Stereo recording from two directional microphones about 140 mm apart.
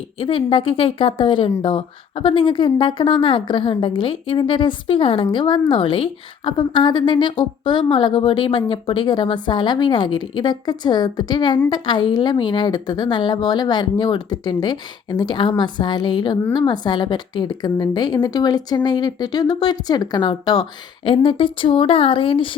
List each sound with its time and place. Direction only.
0.2 s a woman's voice: 40° left (ahead or behind)